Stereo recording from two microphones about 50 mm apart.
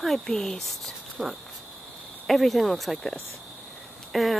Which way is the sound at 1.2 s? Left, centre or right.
Centre.